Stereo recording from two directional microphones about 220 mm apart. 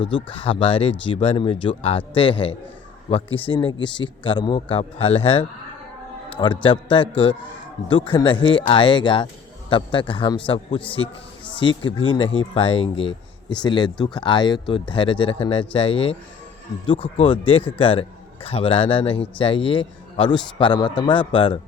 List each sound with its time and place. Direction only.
0.3 s a man's voice: 25° left (ahead or behind)